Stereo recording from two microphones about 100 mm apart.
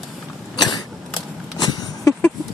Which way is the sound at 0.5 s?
45° left (ahead or behind).